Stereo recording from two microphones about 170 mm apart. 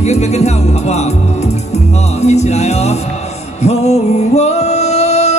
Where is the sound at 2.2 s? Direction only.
40° left (ahead or behind).